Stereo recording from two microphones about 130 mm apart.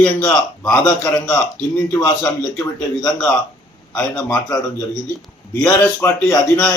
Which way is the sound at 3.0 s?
5° left (ahead or behind).